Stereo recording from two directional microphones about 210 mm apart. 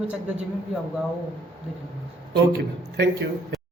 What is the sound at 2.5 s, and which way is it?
Speech, 55° right (ahead or behind).